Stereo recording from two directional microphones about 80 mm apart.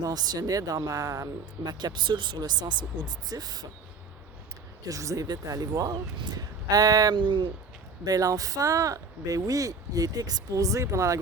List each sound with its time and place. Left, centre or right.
0.0 s speech: right
1.6 s speech: right
2.4 s speech: right
4.9 s speech: right
7.2 s speech: right
8.0 s speech: right